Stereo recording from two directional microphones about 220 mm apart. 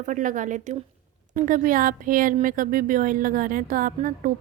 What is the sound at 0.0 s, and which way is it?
Speech, 35° right (ahead or behind).